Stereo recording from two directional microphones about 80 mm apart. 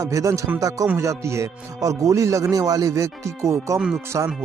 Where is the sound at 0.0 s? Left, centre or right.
Right.